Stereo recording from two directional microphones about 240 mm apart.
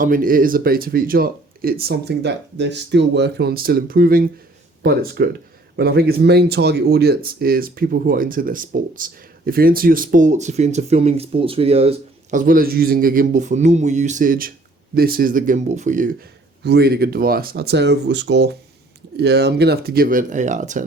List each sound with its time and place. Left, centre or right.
0.0 s speech: right
16.6 s speech: right